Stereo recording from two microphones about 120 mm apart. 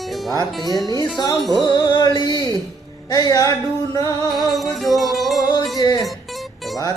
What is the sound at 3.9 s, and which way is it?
Music, 30° left (ahead or behind).